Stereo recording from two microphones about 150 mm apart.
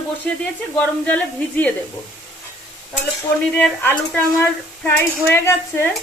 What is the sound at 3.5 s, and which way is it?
A woman's voice, 15° left (ahead or behind).